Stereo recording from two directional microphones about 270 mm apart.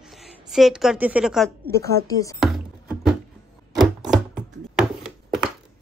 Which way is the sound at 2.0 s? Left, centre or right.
Centre.